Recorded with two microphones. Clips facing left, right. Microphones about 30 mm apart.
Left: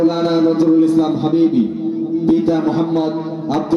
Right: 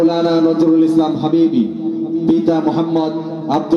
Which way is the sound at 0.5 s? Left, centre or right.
Centre.